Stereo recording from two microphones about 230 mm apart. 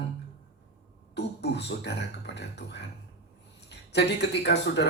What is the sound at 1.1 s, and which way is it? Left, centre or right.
Speech, left.